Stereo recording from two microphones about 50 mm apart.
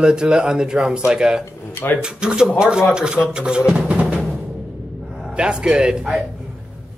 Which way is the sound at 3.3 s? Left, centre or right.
Centre.